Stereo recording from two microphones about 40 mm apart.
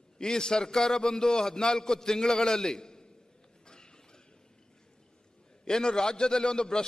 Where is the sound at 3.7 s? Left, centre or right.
Centre.